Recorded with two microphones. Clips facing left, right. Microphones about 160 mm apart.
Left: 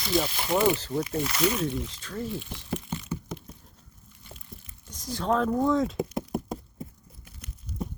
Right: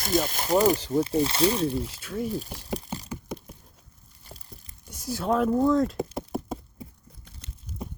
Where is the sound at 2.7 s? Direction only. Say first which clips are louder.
Left 1 dB; 35° right (ahead or behind).